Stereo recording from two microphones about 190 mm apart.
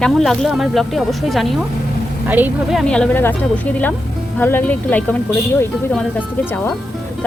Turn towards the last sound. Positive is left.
turn(degrees=10)  # may be behind; listen again after turning